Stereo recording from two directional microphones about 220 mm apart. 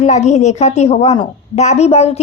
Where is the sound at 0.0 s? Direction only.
30° left (ahead or behind).